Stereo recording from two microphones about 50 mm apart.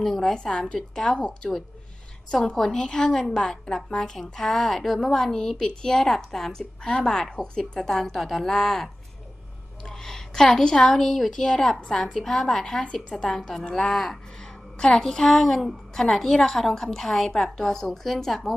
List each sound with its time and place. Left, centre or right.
0.0 s a woman's voice: centre
12.8 s a woman's voice: centre